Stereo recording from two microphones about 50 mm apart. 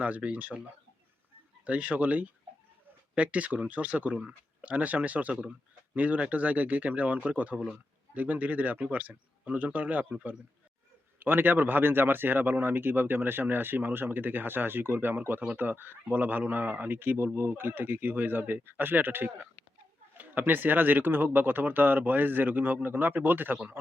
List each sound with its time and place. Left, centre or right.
0.0 s speech: right
1.6 s a man's voice: right
11.2 s a man's voice: right
20.5 s a man's voice: right
23.8 s a man's voice: right